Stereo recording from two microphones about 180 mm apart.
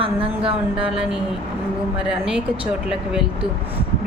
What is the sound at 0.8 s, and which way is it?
Speech, 5° right (ahead or behind).